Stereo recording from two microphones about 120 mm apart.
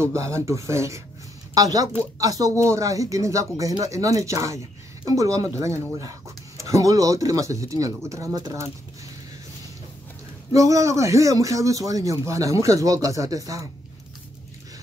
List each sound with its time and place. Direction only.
0.0 s a man's voice: 25° right (ahead or behind)
10.5 s a man's voice: 25° right (ahead or behind)